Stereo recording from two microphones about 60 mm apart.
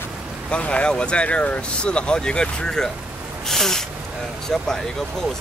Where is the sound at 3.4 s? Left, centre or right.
Centre.